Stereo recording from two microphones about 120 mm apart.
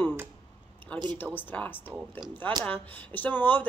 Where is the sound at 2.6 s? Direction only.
15° left (ahead or behind).